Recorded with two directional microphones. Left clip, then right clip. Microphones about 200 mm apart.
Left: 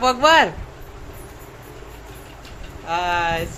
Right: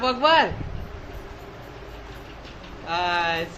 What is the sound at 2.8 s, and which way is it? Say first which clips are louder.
Speech: left 3 dB; 20° left (ahead or behind).